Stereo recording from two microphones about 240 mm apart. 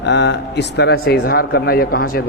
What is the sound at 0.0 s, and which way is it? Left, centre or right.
A man's voice, left.